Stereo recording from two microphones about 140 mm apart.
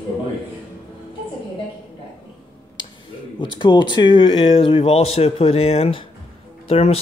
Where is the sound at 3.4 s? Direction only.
35° left (ahead or behind).